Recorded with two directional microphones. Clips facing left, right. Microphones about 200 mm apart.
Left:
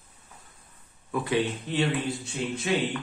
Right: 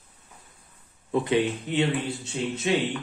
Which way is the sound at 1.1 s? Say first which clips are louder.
Right 3 dB; 20° right (ahead or behind).